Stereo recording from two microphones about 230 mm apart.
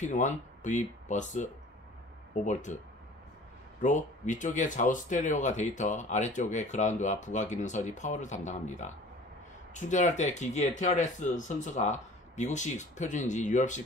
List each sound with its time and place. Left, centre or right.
0.0 s speech: left
3.8 s speech: left